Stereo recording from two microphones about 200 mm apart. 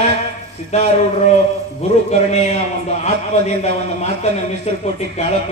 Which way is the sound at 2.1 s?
35° left (ahead or behind).